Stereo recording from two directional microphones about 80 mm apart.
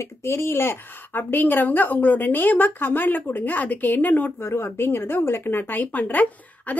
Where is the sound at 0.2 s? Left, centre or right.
Left.